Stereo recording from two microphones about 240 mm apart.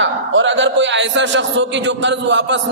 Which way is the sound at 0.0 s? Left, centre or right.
Right.